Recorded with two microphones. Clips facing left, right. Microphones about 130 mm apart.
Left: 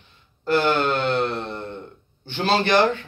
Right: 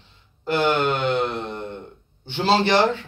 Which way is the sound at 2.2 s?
25° right (ahead or behind).